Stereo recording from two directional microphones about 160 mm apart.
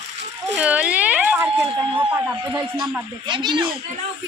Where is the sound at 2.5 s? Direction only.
25° right (ahead or behind).